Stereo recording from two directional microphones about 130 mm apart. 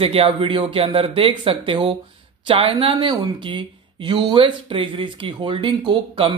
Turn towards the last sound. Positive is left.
turn(degrees=-45)  # may be behind; listen again after turning